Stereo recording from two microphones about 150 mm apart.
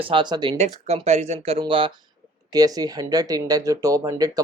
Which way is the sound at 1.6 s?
35° right (ahead or behind).